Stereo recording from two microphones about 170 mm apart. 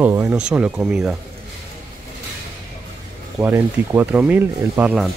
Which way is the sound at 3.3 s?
15° right (ahead or behind).